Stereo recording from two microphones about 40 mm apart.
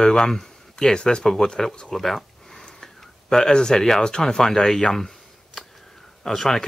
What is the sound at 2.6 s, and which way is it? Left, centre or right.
Speech, centre.